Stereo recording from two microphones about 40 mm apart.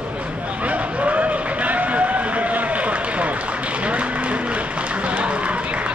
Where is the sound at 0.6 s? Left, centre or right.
Right.